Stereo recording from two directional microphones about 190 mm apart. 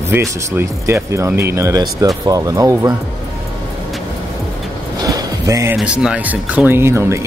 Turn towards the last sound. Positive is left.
turn(degrees=-15)  # may be behind; listen again after turning